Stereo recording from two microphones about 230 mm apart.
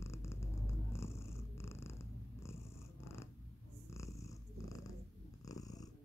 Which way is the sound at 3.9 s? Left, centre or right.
Centre.